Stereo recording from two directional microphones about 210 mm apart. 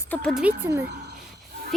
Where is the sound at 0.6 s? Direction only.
15° right (ahead or behind).